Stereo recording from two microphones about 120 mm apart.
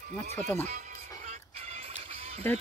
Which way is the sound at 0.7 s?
75° right (ahead or behind).